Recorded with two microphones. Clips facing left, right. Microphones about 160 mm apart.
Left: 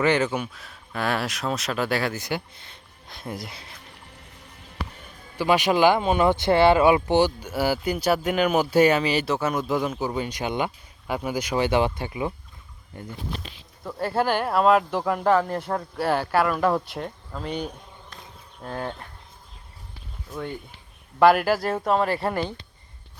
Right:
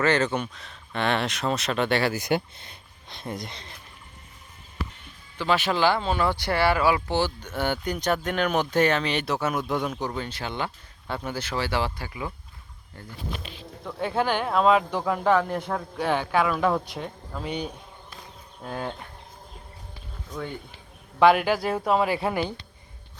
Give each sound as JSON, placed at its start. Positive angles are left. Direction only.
{"t": 0.0, "sound": "speech", "side_deg": 10}
{"t": 2.1, "sound": "speech", "side_deg": -20}
{"t": 3.1, "sound": "speech", "side_deg": 0}
{"t": 5.4, "sound": "speech", "side_deg": 15}
{"t": 10.1, "sound": "speech", "side_deg": 15}
{"t": 13.8, "sound": "speech", "side_deg": 5}
{"t": 20.3, "sound": "speech", "side_deg": 5}